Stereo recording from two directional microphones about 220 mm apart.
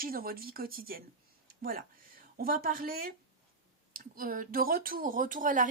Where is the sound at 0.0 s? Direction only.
40° right (ahead or behind).